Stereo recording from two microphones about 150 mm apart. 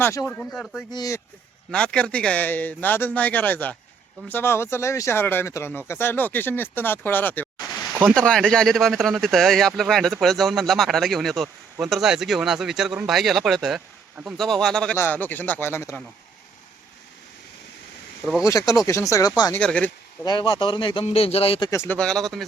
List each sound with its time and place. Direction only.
0.0 s speech: 15° left (ahead or behind)
0.5 s speech: 5° left (ahead or behind)
0.9 s speech: 25° left (ahead or behind)
1.7 s speech: 5° left (ahead or behind)
18.4 s speech: 20° left (ahead or behind)
19.5 s speech: 10° left (ahead or behind)
20.2 s speech: 30° left (ahead or behind)
21.7 s speech: 20° left (ahead or behind)
21.9 s speech: 5° left (ahead or behind)